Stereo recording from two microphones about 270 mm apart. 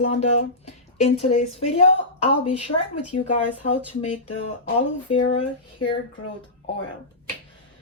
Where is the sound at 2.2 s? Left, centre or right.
Left.